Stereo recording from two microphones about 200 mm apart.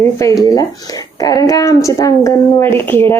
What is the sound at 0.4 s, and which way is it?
A child's voice, 20° left (ahead or behind).